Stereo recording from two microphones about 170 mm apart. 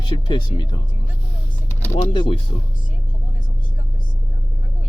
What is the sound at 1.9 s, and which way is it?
Speech, 30° left (ahead or behind).